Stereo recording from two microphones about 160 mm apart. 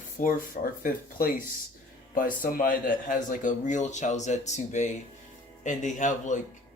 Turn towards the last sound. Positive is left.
turn(degrees=50)  # may be behind; listen again after turning